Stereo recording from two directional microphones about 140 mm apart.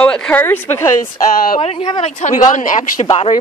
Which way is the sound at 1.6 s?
40° left (ahead or behind).